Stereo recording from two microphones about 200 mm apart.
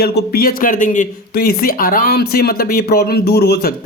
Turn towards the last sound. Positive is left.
turn(degrees=55)  # may be behind; listen again after turning